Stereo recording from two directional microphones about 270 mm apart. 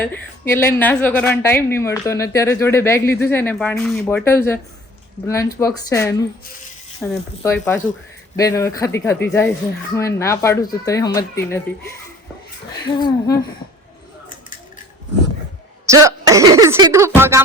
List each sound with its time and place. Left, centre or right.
0.0 s a woman's voice: centre
15.9 s speech: centre